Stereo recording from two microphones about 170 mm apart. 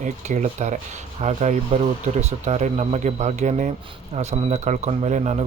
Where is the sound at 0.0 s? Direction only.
45° right (ahead or behind).